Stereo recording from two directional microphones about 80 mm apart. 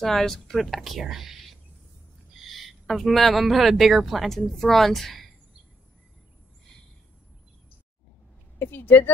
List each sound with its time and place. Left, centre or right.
0.0 s speech: centre
2.4 s speech: centre
8.5 s a woman's voice: left